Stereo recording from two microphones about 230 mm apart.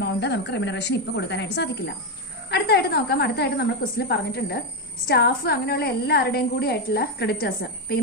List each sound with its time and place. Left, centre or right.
0.0 s a woman's voice: left